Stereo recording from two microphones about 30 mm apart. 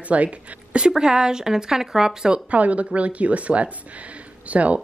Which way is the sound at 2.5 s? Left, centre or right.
Right.